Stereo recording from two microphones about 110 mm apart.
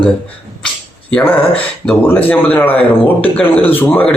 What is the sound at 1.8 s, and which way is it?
Speech, 20° left (ahead or behind).